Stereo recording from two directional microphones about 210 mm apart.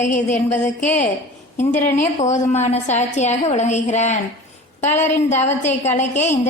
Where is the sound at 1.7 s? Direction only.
35° left (ahead or behind).